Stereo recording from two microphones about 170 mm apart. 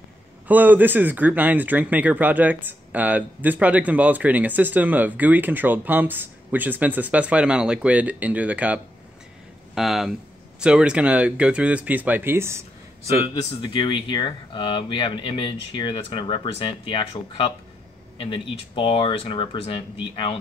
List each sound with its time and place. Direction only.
0.5 s speech: 10° right (ahead or behind)
13.3 s speech: 25° left (ahead or behind)